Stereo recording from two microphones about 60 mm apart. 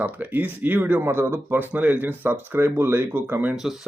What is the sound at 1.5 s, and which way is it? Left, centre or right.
Speech, right.